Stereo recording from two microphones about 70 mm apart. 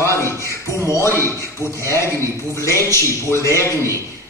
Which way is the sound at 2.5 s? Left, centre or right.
Left.